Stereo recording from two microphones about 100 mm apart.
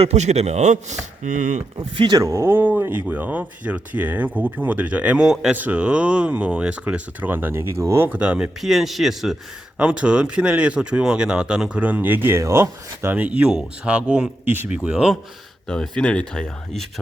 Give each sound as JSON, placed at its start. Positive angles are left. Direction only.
{"t": 0.0, "sound": "a man's voice", "side_deg": -90}
{"t": 1.8, "sound": "speech", "side_deg": -55}
{"t": 2.1, "sound": "speech", "side_deg": -30}
{"t": 14.8, "sound": "speech", "side_deg": -10}
{"t": 15.7, "sound": "speech", "side_deg": 10}